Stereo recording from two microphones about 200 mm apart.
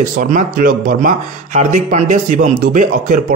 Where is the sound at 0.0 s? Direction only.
40° right (ahead or behind).